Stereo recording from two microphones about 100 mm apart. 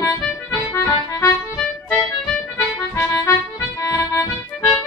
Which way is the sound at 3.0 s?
30° left (ahead or behind).